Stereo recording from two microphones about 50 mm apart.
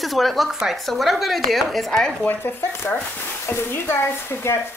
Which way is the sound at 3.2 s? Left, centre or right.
Left.